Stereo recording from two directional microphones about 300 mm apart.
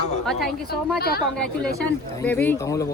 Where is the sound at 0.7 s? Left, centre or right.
Left.